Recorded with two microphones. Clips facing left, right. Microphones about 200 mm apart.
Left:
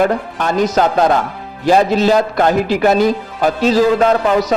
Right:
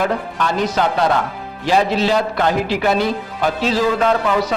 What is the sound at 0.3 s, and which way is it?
A man's voice, 45° left (ahead or behind).